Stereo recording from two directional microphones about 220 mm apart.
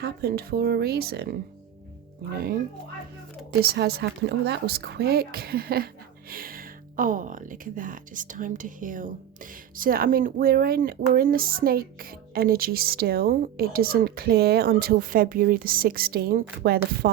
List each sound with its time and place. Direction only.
0.0 s a woman's voice: 45° right (ahead or behind)
3.6 s a woman's voice: 45° right (ahead or behind)